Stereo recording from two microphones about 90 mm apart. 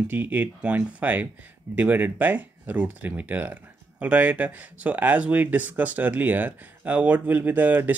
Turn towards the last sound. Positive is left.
turn(degrees=-20)  # may be behind; listen again after turning